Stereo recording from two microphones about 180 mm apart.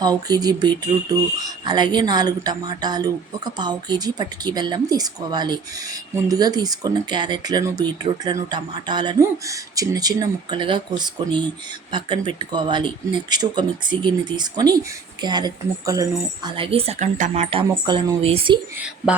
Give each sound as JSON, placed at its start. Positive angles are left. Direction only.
{"t": 0.0, "sound": "speech", "side_deg": -20}